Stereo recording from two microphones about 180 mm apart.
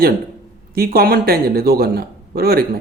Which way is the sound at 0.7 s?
55° right (ahead or behind).